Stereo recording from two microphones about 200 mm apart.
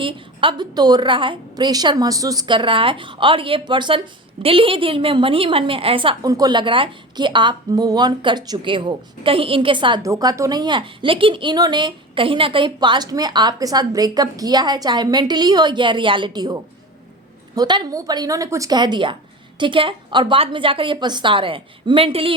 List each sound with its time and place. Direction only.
0.0 s a woman's voice: 25° right (ahead or behind)